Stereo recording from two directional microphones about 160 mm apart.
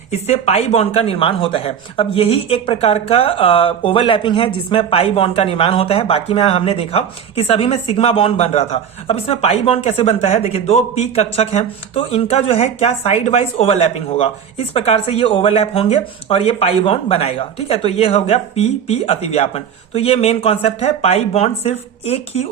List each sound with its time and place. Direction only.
0.1 s speech: 40° left (ahead or behind)